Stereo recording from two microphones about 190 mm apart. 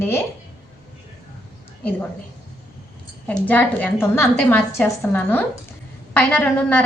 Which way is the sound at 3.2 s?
10° left (ahead or behind).